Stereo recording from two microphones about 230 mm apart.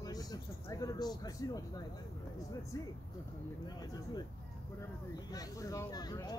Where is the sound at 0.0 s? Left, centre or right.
Centre.